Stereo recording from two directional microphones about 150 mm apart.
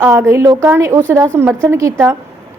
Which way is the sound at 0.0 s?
15° right (ahead or behind).